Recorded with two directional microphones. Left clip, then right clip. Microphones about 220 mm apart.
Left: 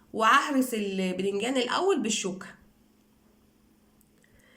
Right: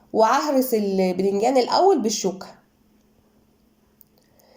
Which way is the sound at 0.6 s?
15° left (ahead or behind).